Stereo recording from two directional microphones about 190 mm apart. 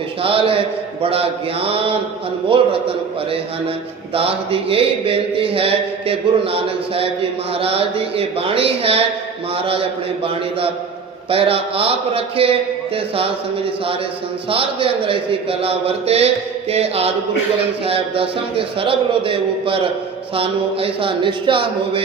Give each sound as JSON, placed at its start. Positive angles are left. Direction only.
{"t": 0.2, "sound": "a sound", "side_deg": -30}
{"t": 1.0, "sound": "speech", "side_deg": -30}
{"t": 4.1, "sound": "speech", "side_deg": -30}
{"t": 11.3, "sound": "speech", "side_deg": -30}
{"t": 14.5, "sound": "speech", "side_deg": -30}
{"t": 16.7, "sound": "mantra", "side_deg": -30}
{"t": 17.8, "sound": "speech", "side_deg": -30}